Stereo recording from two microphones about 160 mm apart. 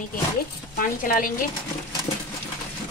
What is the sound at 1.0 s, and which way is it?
Speech, 60° left (ahead or behind).